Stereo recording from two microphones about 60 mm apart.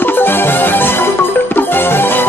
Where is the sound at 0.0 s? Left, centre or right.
Left.